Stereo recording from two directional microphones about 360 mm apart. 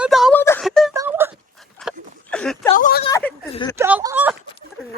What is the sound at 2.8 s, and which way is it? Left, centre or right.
Speech, left.